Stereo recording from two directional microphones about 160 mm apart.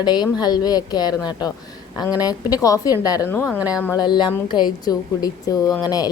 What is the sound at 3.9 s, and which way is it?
Speech, 30° left (ahead or behind).